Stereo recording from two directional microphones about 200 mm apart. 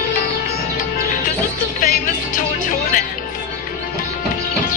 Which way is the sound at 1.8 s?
45° left (ahead or behind).